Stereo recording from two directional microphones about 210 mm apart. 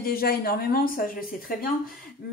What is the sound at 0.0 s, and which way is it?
A woman's voice, 45° left (ahead or behind).